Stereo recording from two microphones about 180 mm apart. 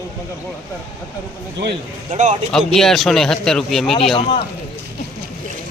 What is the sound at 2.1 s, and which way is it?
Speech, 40° right (ahead or behind).